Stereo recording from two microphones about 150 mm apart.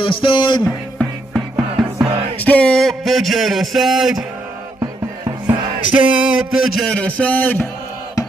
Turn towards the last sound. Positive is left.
turn(degrees=10)  # may be behind; listen again after turning